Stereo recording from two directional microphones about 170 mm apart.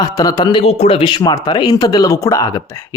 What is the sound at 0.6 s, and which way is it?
Speech, 35° left (ahead or behind).